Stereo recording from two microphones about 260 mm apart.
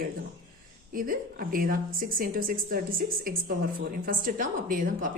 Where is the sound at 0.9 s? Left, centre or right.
Right.